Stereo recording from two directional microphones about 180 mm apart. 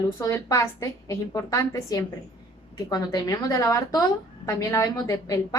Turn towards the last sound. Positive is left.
turn(degrees=20)  # may be behind; listen again after turning